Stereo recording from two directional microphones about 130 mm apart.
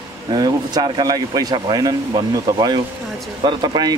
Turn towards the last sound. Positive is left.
turn(degrees=-35)  # may be behind; listen again after turning